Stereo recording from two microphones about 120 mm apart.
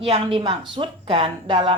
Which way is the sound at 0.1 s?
50° right (ahead or behind).